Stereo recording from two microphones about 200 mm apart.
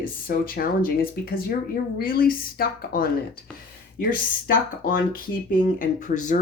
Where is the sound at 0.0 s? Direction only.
45° left (ahead or behind).